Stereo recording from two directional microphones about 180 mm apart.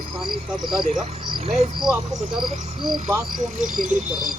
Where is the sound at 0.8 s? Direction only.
45° right (ahead or behind).